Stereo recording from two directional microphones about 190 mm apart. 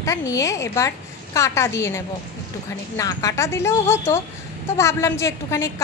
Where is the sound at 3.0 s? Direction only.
20° left (ahead or behind).